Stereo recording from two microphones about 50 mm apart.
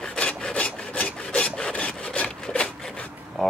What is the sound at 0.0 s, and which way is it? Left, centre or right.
Rub, left.